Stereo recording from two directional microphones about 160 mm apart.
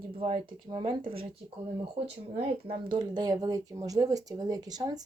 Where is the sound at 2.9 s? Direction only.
25° right (ahead or behind).